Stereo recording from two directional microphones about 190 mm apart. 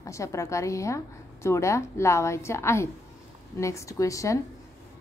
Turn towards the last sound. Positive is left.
turn(degrees=15)  # may be behind; listen again after turning